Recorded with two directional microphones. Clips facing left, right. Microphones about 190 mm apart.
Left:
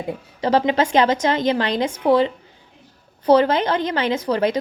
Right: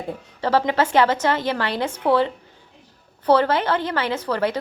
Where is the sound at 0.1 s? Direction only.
15° left (ahead or behind).